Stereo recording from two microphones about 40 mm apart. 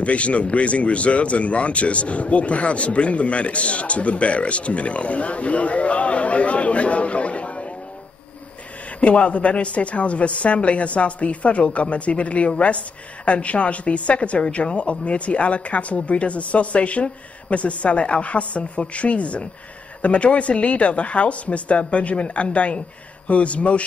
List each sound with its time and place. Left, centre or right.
0.0 s speech: left
9.0 s speech: left